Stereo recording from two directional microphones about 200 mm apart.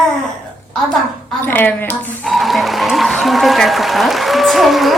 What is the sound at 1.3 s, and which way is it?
Speech, 10° left (ahead or behind).